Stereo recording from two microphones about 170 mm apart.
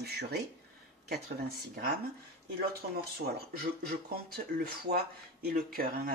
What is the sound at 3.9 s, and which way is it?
Speech, 65° right (ahead or behind).